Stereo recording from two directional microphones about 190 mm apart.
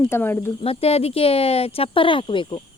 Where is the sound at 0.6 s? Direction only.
30° left (ahead or behind).